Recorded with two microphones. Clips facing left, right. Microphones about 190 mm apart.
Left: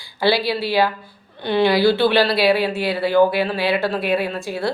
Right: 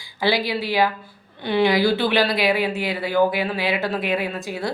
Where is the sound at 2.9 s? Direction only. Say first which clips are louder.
Left 5 dB; 70° left (ahead or behind).